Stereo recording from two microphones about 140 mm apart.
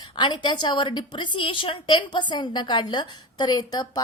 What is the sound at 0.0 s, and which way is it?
A woman's voice, 35° left (ahead or behind).